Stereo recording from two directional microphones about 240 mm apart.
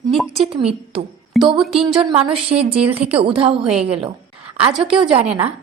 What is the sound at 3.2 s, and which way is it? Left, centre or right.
Speech, right.